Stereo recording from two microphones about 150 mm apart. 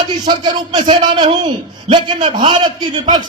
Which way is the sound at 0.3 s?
30° right (ahead or behind).